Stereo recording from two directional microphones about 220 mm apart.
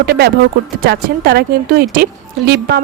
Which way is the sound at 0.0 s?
45° right (ahead or behind).